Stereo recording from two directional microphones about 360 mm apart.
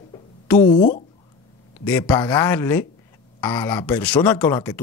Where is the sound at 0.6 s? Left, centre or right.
Left.